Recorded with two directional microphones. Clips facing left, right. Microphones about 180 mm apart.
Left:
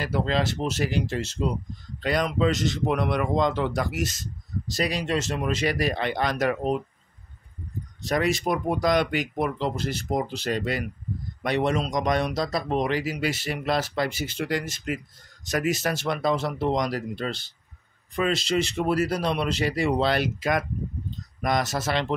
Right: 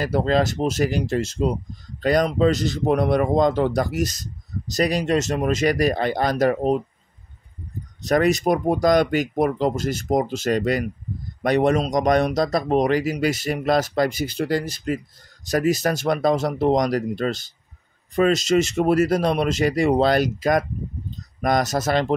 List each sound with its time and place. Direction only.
0.0 s speech: 40° right (ahead or behind)
8.0 s speech: 45° right (ahead or behind)